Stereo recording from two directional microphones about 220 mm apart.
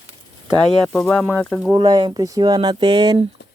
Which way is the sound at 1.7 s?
20° right (ahead or behind).